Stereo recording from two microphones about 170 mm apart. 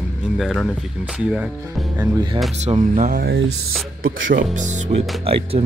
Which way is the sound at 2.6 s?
45° right (ahead or behind).